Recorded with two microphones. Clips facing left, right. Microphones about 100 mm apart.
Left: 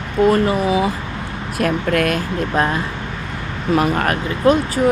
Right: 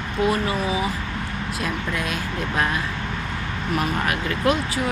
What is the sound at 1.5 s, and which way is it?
Speech, 60° left (ahead or behind).